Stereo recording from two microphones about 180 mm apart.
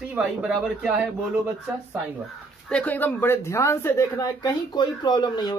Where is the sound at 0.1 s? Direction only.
5° right (ahead or behind).